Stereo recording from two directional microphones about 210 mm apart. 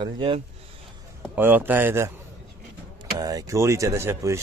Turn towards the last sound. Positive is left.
turn(degrees=-15)  # may be behind; listen again after turning